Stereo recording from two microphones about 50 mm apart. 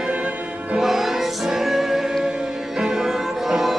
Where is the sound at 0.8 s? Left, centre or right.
Centre.